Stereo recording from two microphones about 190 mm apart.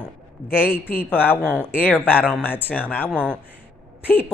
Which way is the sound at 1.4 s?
10° right (ahead or behind).